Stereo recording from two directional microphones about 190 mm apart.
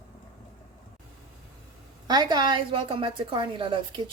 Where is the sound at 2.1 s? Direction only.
20° right (ahead or behind).